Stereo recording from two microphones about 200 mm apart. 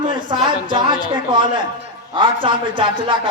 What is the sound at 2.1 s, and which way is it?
A man's voice, 25° right (ahead or behind).